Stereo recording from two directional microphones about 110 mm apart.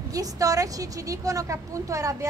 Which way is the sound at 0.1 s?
35° right (ahead or behind).